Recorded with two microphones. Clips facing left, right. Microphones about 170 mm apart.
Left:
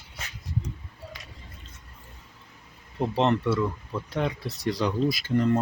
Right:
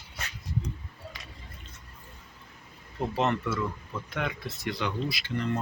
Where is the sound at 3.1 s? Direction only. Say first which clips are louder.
Left 5 dB; 30° left (ahead or behind).